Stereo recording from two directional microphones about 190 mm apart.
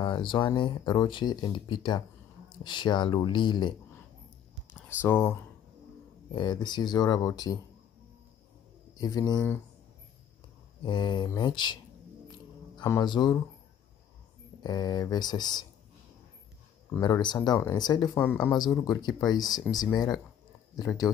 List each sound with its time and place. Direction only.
0.0 s speech: 25° left (ahead or behind)
4.8 s speech: 15° left (ahead or behind)
8.9 s speech: 20° left (ahead or behind)
10.8 s speech: 25° left (ahead or behind)
12.3 s a sound: 20° left (ahead or behind)
14.6 s speech: 20° left (ahead or behind)
16.9 s speech: 20° left (ahead or behind)
18.2 s speech: 10° left (ahead or behind)
18.5 s speech: 20° left (ahead or behind)